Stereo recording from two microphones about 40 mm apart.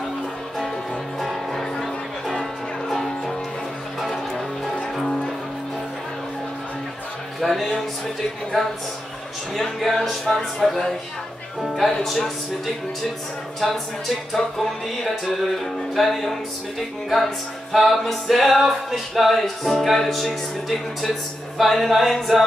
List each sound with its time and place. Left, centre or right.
1.2 s music: centre
2.9 s music: centre
5.0 s music: centre
7.3 s music: centre
11.8 s speech: centre
13.6 s music: centre
17.7 s music: centre